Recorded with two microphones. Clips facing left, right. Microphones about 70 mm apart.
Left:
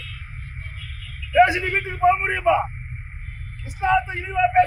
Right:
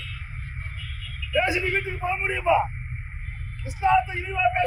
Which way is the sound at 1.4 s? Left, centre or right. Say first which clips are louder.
Left 7 dB; left.